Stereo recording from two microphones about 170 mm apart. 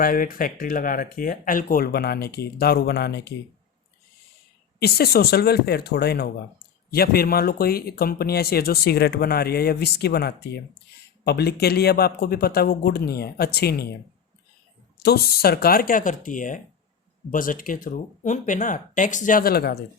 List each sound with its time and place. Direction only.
0.0 s speech: 55° left (ahead or behind); by 3.3 s 80° left
4.8 s speech: 65° left (ahead or behind)
14.9 s speech: 70° left (ahead or behind)